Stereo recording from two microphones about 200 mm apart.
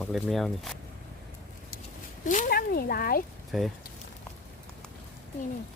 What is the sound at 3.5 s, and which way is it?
Speech, centre (ahead or behind).